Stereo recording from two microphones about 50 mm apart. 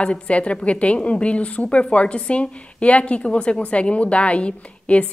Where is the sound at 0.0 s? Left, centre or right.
Left.